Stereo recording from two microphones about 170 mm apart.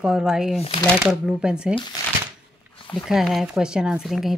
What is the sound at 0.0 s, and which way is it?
Speech, 5° right (ahead or behind).